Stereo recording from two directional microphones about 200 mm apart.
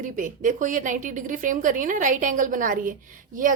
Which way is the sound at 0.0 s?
40° right (ahead or behind).